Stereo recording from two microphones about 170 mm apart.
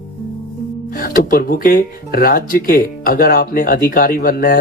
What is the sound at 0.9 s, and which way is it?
Speech, 55° left (ahead or behind).